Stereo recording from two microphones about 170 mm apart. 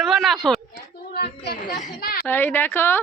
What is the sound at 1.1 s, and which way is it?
Speech, 70° left (ahead or behind).